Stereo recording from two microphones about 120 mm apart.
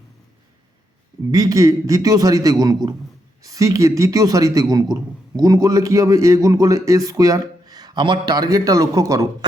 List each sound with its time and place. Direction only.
1.3 s a man's voice: 30° right (ahead or behind)